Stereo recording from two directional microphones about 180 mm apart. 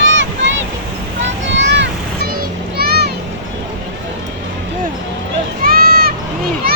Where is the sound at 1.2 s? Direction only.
85° right; by 3.1 s 60° right (ahead or behind).